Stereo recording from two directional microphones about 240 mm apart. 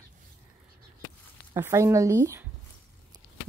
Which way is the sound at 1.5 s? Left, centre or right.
Centre.